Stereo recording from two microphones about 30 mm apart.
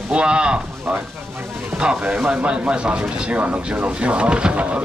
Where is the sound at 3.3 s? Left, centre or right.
Right.